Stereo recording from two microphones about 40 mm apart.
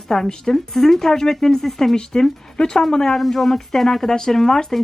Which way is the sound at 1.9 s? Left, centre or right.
Centre.